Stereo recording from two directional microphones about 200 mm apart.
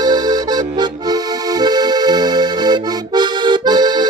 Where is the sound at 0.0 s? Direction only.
20° right (ahead or behind).